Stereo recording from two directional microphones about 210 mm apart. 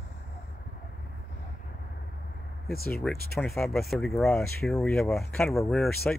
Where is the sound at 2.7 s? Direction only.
45° left (ahead or behind).